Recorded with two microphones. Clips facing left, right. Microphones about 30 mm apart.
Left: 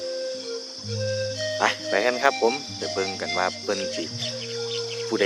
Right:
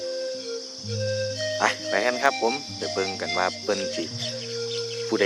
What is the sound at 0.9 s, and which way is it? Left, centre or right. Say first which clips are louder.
Speech: even; centre.